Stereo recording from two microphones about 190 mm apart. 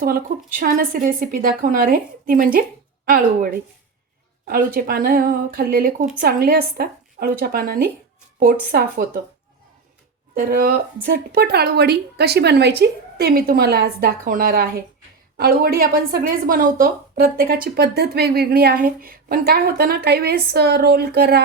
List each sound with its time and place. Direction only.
0.0 s speech: 50° right (ahead or behind)
10.3 s a woman's voice: 50° right (ahead or behind)